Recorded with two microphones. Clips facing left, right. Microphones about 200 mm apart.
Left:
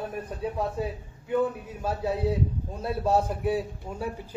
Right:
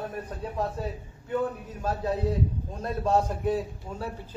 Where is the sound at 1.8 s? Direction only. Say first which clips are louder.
Even; 10° left (ahead or behind).